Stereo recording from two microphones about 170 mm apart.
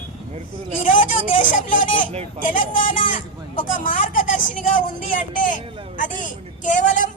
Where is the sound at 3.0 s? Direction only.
50° left (ahead or behind).